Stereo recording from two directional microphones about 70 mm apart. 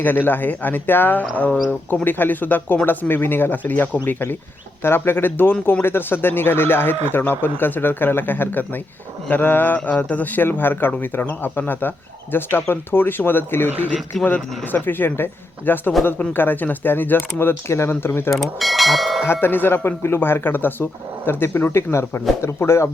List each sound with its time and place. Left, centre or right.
0.0 s speech: left
18.3 s speech: centre
19.2 s speech: left